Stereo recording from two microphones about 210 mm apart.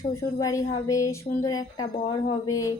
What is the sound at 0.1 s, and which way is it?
A woman's voice, 15° left (ahead or behind).